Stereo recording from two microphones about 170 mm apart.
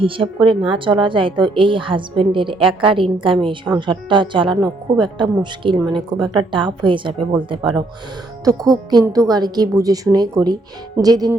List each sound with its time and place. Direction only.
0.0 s speech: 30° right (ahead or behind)